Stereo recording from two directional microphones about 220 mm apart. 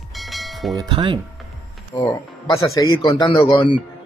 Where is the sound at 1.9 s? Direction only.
15° left (ahead or behind).